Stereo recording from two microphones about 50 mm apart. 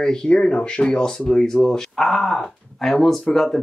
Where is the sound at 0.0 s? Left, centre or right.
Centre.